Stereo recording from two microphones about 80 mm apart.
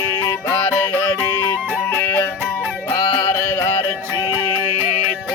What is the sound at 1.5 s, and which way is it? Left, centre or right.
Music, left.